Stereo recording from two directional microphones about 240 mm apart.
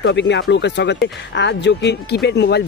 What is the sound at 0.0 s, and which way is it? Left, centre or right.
Speech, left.